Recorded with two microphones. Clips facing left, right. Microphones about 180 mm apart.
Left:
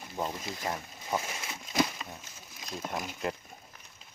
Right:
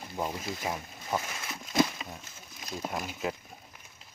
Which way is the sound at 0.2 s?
5° right (ahead or behind).